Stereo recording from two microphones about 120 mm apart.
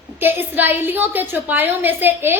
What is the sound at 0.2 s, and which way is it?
A woman's voice, 15° right (ahead or behind).